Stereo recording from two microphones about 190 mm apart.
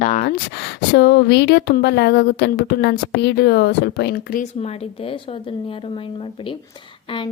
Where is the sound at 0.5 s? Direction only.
60° left (ahead or behind).